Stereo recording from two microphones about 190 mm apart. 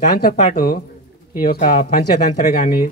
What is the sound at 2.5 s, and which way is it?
Speech, 50° left (ahead or behind).